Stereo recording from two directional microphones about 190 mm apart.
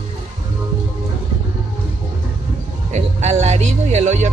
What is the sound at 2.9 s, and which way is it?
Music, 35° right (ahead or behind).